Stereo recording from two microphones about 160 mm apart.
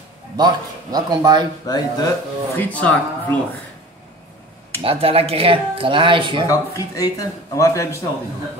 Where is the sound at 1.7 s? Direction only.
25° left (ahead or behind).